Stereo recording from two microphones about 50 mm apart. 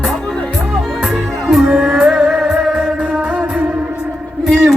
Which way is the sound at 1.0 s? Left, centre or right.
Centre.